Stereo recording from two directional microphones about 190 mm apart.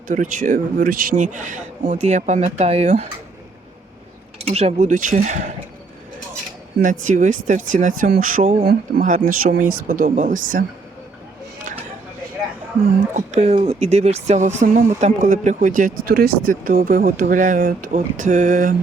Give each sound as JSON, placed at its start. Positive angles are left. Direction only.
{"t": 0.1, "sound": "speech", "side_deg": -40}
{"t": 4.4, "sound": "speech", "side_deg": -35}
{"t": 6.8, "sound": "speech", "side_deg": -40}
{"t": 13.1, "sound": "speech", "side_deg": -35}